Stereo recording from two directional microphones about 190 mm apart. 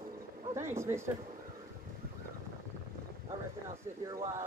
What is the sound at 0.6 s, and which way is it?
Speech, 15° right (ahead or behind).